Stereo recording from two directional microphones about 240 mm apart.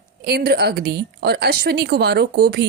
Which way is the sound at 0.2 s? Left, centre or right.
Right.